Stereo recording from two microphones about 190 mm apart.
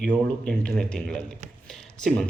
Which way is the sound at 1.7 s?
Centre (ahead or behind).